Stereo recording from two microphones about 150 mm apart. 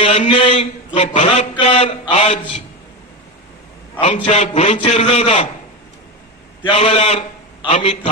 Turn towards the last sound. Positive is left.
turn(degrees=50)  # may be behind; listen again after turning